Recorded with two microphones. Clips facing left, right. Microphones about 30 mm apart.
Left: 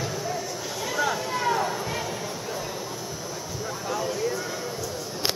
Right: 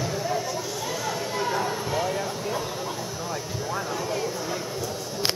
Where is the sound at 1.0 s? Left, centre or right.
Left.